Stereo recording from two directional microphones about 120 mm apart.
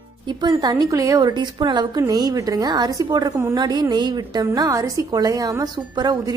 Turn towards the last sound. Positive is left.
turn(degrees=-35)  # may be behind; listen again after turning